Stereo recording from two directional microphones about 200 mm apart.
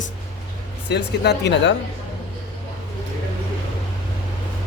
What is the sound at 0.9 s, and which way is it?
Speech, 55° left (ahead or behind).